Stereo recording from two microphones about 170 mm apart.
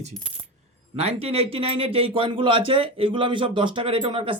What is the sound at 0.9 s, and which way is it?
Speech, 35° right (ahead or behind).